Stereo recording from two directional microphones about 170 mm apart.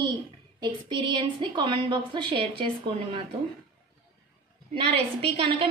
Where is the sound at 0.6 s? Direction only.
25° right (ahead or behind).